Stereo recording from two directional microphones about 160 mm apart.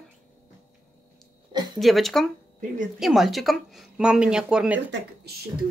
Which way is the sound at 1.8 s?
Centre (ahead or behind).